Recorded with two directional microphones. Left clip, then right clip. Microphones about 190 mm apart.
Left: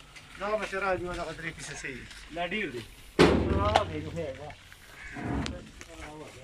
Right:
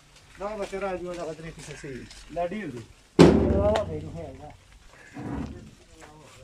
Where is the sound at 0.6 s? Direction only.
15° right (ahead or behind).